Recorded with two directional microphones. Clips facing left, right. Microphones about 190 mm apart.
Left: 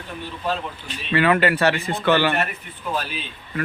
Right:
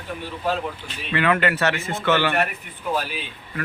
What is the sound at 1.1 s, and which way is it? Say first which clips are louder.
Speech: left 3 dB; 30° left (ahead or behind).